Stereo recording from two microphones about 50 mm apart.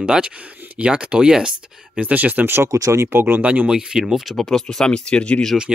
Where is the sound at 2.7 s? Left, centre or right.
Right.